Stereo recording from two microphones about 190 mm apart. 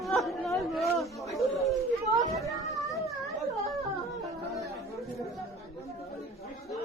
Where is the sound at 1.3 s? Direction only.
Centre (ahead or behind).